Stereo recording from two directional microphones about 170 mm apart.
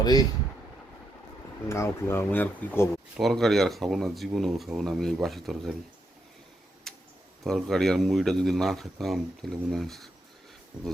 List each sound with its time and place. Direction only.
0.0 s speech: 25° left (ahead or behind)
1.6 s a man's voice: 15° left (ahead or behind); by 5.7 s centre (ahead or behind)
6.9 s a sound: centre (ahead or behind)
7.4 s a man's voice: centre (ahead or behind)